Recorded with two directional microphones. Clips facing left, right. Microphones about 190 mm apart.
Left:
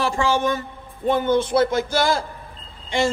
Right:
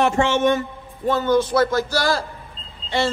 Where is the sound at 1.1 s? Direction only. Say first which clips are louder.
Even; 15° left (ahead or behind).